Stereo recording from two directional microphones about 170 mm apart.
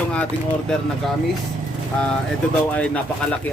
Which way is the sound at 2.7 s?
5° left (ahead or behind).